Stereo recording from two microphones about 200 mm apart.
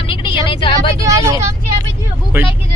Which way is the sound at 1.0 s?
15° right (ahead or behind).